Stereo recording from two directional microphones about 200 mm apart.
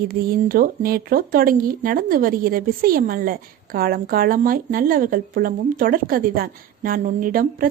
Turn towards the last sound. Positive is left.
turn(degrees=-45)  # may be behind; listen again after turning